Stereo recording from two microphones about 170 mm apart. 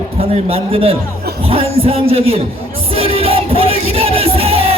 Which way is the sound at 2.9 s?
35° right (ahead or behind).